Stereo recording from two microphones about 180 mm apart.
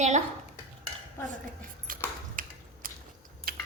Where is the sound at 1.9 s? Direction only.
50° right (ahead or behind).